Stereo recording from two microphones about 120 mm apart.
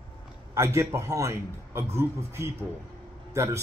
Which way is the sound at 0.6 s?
25° right (ahead or behind).